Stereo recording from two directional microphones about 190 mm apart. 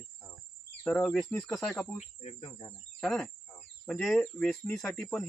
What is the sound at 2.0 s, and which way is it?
Speech, 35° left (ahead or behind).